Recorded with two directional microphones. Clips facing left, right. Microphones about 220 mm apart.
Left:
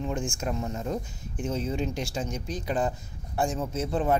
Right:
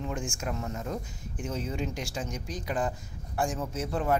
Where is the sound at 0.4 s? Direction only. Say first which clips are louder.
Left 3 dB; 25° left (ahead or behind).